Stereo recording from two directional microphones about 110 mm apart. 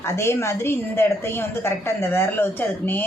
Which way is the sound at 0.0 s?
25° left (ahead or behind).